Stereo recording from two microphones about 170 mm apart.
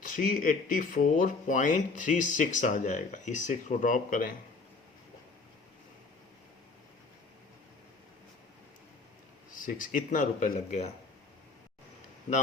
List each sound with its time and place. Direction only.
0.0 s speech: 50° left (ahead or behind)
9.6 s speech: 55° left (ahead or behind)